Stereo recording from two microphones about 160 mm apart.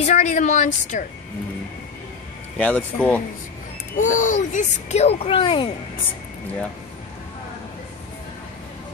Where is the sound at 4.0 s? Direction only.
55° left (ahead or behind); by 5.7 s 30° left (ahead or behind).